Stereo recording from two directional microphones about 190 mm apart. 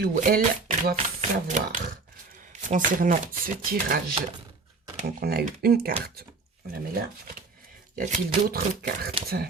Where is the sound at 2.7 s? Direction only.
45° right (ahead or behind).